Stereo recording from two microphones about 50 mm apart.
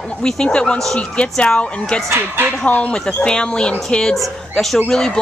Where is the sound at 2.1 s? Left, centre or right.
Right.